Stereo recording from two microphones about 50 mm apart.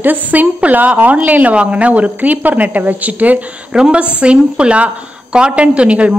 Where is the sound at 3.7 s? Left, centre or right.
Centre.